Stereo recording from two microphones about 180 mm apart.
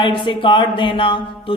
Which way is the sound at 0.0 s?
30° left (ahead or behind).